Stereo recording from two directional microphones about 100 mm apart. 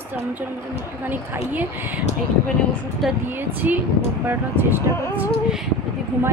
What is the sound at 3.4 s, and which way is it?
Speech, 20° right (ahead or behind).